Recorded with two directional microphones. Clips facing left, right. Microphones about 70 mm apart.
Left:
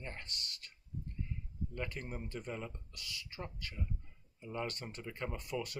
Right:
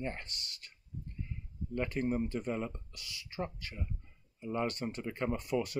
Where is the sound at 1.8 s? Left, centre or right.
Right.